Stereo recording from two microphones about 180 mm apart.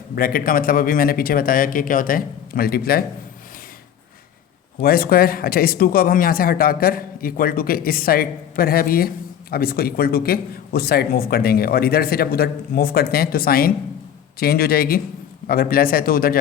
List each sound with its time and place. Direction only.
0.2 s speech: 55° left (ahead or behind)
4.8 s speech: 55° left (ahead or behind)